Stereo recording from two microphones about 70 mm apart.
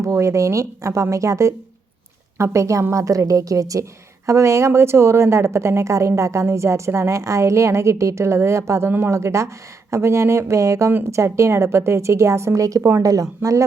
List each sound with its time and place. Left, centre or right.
0.0 s a woman's voice: right
8.9 s speech: right
9.1 s a woman's voice: right